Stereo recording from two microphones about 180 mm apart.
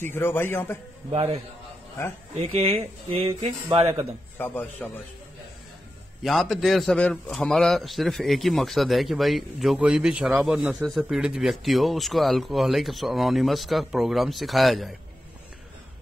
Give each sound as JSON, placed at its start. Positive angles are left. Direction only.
{"t": 0.0, "sound": "a man's voice", "side_deg": 10}
{"t": 2.3, "sound": "speech", "side_deg": -35}
{"t": 4.4, "sound": "a man's voice", "side_deg": 10}
{"t": 6.2, "sound": "a man's voice", "side_deg": 0}